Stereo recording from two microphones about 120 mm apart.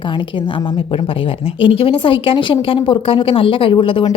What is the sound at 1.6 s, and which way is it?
A woman's voice, 50° left (ahead or behind).